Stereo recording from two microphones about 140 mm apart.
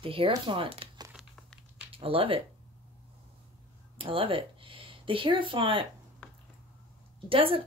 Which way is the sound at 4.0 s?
40° right (ahead or behind).